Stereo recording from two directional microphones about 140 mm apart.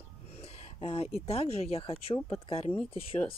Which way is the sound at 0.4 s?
50° left (ahead or behind).